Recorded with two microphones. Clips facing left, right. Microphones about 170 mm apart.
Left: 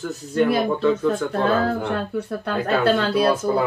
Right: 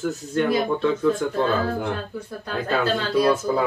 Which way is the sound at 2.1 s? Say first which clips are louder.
Left 5 dB; 65° left (ahead or behind).